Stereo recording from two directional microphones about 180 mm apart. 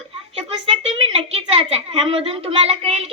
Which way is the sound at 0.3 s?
35° right (ahead or behind).